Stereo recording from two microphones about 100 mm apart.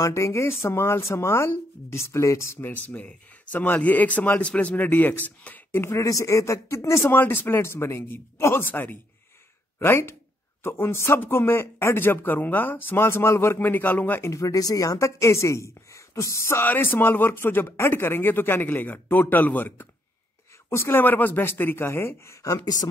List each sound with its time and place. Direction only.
0.0 s speech: 30° left (ahead or behind)
2.7 s speech: 15° left (ahead or behind); by 22.8 s 35° left (ahead or behind)